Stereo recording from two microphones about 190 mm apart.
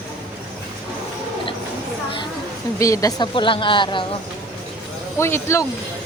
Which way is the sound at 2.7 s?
15° left (ahead or behind).